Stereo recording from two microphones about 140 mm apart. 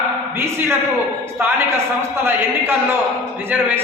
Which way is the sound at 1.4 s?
15° right (ahead or behind).